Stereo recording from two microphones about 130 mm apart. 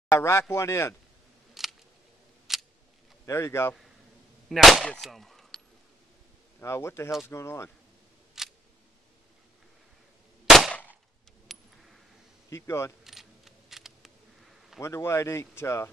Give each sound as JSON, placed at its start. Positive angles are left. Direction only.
{"t": 0.1, "sound": "speech", "side_deg": 20}
{"t": 1.5, "sound": "a sound", "side_deg": 0}
{"t": 3.3, "sound": "speech", "side_deg": 20}
{"t": 4.5, "sound": "gunshot", "side_deg": 0}
{"t": 6.6, "sound": "speech", "side_deg": 20}
{"t": 8.4, "sound": "camera", "side_deg": -5}
{"t": 10.4, "sound": "cap gun", "side_deg": 0}
{"t": 10.7, "sound": "cap gun", "side_deg": 15}
{"t": 11.4, "sound": "coin", "side_deg": 0}
{"t": 12.4, "sound": "speech", "side_deg": 20}
{"t": 13.0, "sound": "camera", "side_deg": 0}
{"t": 14.8, "sound": "speech", "side_deg": 20}